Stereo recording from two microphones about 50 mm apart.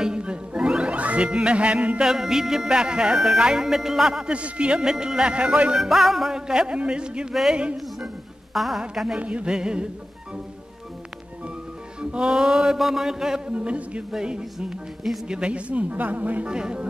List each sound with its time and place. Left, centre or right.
0.0 s music: centre
2.0 s speech: centre
4.3 s speech: right
5.9 s speech: centre
8.5 s a woman's voice: centre
9.2 s speech: right
12.0 s speech: centre
13.5 s speech: right
16.4 s speech: centre